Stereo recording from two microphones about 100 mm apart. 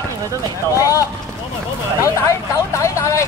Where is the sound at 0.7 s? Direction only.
35° left (ahead or behind).